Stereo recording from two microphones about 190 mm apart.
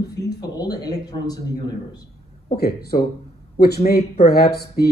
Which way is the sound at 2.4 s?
55° left (ahead or behind).